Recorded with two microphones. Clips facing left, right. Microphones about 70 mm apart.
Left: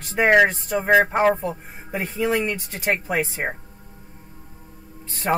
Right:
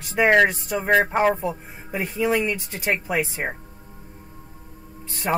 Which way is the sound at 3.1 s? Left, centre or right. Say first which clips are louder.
Left 1 dB; centre.